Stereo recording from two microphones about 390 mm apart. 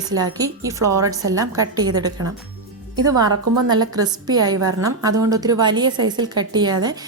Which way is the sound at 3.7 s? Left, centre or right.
Centre.